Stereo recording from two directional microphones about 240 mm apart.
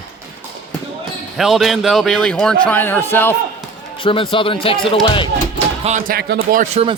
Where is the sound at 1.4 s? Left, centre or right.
Centre.